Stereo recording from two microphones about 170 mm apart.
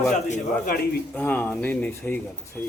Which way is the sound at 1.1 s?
10° left (ahead or behind).